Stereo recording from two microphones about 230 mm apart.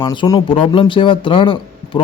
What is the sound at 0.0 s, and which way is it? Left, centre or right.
Speech, left.